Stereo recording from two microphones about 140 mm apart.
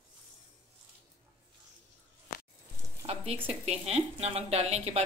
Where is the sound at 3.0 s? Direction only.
45° right (ahead or behind).